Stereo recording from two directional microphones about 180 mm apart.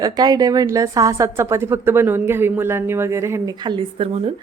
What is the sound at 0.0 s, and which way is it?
A woman's voice, 20° right (ahead or behind).